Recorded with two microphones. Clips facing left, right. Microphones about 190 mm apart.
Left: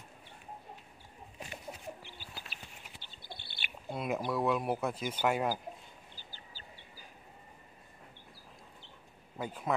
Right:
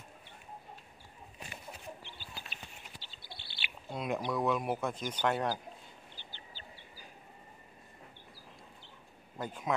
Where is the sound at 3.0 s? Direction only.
50° left (ahead or behind).